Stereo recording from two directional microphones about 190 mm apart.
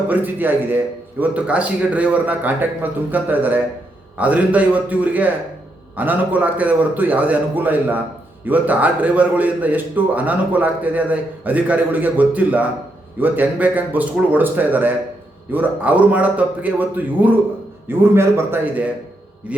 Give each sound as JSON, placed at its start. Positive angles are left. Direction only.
{"t": 0.1, "sound": "a man's voice", "side_deg": -10}